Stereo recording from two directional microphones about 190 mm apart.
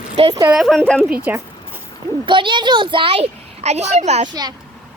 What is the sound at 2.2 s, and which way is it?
A woman's voice, 25° right (ahead or behind).